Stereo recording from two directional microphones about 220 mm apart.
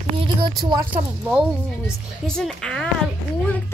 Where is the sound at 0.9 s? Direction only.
5° right (ahead or behind).